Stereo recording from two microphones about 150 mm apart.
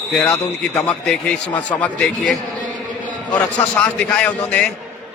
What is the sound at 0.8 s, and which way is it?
A man's voice, 5° left (ahead or behind).